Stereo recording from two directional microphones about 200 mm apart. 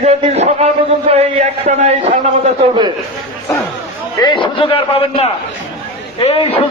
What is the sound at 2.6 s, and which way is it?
Speech, 25° right (ahead or behind).